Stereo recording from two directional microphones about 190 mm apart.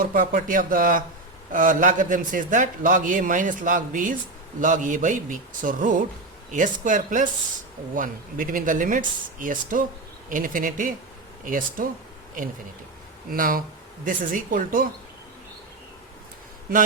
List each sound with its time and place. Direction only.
0.0 s a man's voice: 50° right (ahead or behind)
13.3 s a man's voice: 50° right (ahead or behind)
16.7 s a man's voice: 50° right (ahead or behind)